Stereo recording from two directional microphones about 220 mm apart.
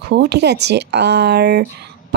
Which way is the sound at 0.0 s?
50° right (ahead or behind).